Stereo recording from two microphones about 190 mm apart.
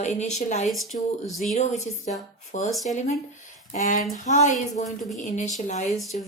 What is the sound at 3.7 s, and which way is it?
Speech, 40° left (ahead or behind).